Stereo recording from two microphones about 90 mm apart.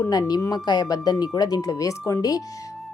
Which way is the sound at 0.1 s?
45° left (ahead or behind).